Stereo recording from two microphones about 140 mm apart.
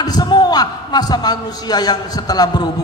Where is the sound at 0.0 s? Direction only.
30° left (ahead or behind).